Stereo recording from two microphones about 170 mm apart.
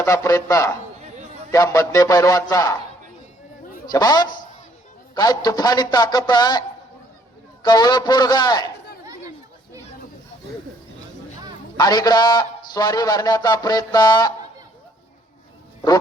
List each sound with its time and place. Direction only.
0.0 s a man's voice: 20° left (ahead or behind)
3.9 s a man's voice: 25° left (ahead or behind)
7.6 s a man's voice: 25° left (ahead or behind)
11.8 s a man's voice: 25° left (ahead or behind)